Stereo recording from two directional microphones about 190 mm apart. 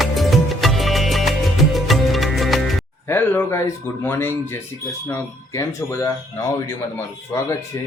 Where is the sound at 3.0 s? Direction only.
10° left (ahead or behind).